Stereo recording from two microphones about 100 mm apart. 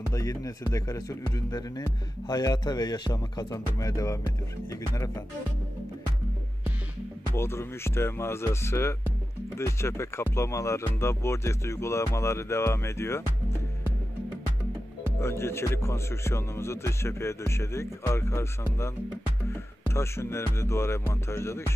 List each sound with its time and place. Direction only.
0.1 s speech: 35° left (ahead or behind)
7.3 s speech: 25° left (ahead or behind)
15.1 s speech: 25° left (ahead or behind)